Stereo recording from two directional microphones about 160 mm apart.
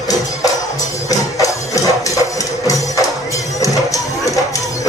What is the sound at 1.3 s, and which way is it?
Music, 20° left (ahead or behind).